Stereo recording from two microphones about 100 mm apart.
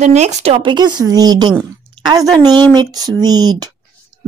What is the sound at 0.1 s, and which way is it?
A woman's voice, 90° right.